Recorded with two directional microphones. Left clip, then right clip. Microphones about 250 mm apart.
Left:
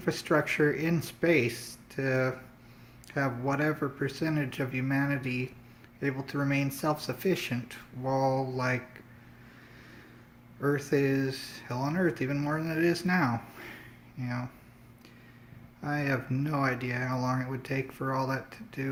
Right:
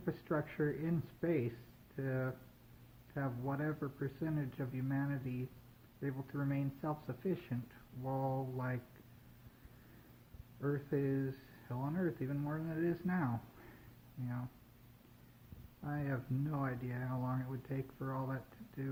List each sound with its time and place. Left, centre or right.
0.0 s speech: left
10.6 s speech: left
15.8 s speech: left